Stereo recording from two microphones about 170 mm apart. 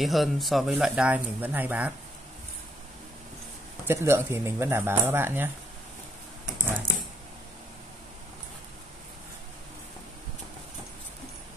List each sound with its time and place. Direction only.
0.0 s speech: centre (ahead or behind)
3.8 s speech: 15° right (ahead or behind)